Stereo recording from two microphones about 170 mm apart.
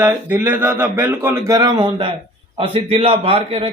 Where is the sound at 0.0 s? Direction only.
10° right (ahead or behind).